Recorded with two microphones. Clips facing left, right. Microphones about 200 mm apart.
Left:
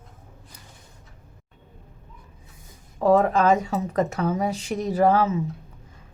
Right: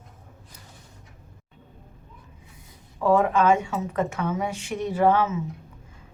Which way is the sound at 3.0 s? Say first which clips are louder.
Left 2 dB; 40° left (ahead or behind).